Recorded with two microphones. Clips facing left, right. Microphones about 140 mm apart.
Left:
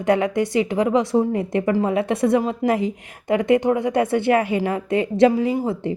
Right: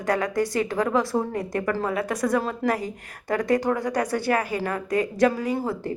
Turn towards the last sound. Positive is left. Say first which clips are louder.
# left 4 dB
turn(degrees=20)  # may be behind; listen again after turning